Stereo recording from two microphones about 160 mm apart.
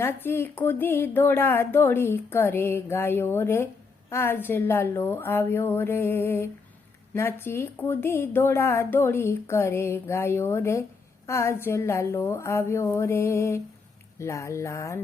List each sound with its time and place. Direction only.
0.0 s speech: 15° left (ahead or behind)